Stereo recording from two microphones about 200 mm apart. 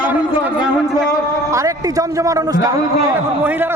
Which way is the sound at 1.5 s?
15° right (ahead or behind).